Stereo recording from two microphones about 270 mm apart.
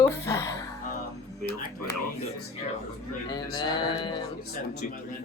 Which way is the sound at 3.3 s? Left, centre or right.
Centre.